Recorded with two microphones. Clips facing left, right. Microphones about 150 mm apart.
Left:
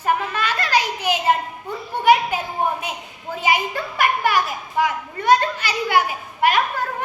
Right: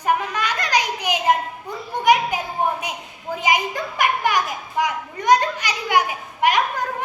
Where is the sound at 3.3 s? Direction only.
15° right (ahead or behind).